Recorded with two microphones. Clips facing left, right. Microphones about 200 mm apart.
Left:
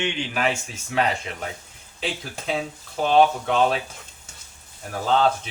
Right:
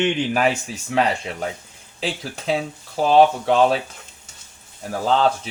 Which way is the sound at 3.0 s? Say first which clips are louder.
Right 3 dB; 35° right (ahead or behind).